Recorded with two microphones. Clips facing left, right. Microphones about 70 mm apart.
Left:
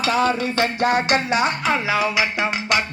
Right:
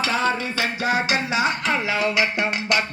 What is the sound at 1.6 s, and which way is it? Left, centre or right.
Music, centre.